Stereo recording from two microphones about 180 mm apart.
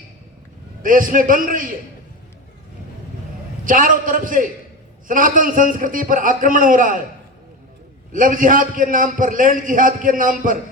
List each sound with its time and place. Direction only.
0.8 s a man's voice: 50° right (ahead or behind)
3.6 s a man's voice: 50° right (ahead or behind)
8.1 s a man's voice: 50° right (ahead or behind)